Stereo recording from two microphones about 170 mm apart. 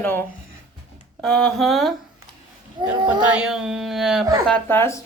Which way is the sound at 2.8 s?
30° right (ahead or behind).